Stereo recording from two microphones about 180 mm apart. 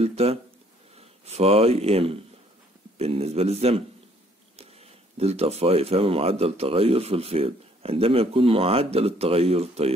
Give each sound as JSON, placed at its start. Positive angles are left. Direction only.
{"t": 0.0, "sound": "speech", "side_deg": -35}